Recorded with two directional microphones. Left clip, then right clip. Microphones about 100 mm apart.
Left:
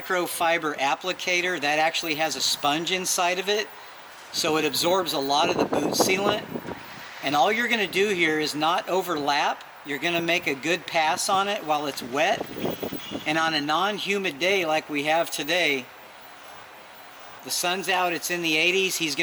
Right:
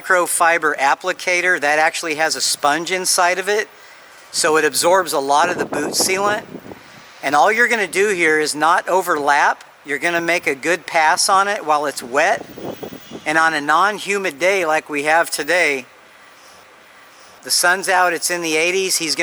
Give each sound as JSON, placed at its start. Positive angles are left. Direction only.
{"t": 0.2, "sound": "speech", "side_deg": -35}
{"t": 17.4, "sound": "speech", "side_deg": -35}